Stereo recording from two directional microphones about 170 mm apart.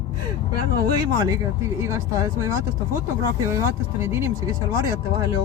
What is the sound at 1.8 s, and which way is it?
Speech, 15° right (ahead or behind).